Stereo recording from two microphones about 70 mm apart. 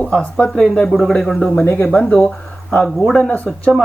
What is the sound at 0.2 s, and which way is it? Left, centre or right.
Speech, centre.